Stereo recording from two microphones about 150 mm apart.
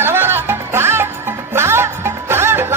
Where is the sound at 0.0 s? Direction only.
15° right (ahead or behind).